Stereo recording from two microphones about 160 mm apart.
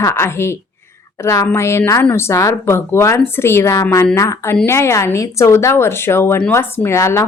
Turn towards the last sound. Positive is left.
turn(degrees=15)  # may be behind; listen again after turning